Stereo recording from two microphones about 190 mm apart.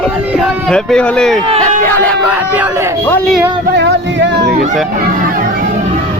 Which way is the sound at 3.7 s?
65° right (ahead or behind).